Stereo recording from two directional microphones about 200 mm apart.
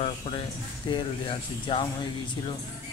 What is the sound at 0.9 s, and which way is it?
Speech, 25° left (ahead or behind).